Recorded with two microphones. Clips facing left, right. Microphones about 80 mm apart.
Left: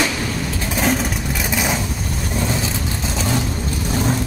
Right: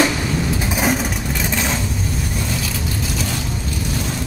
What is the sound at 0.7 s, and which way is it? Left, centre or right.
Vehicle, centre.